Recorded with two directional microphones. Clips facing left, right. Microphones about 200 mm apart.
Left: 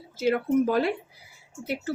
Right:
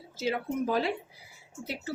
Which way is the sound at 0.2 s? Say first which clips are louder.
Left 8 dB; 55° left (ahead or behind).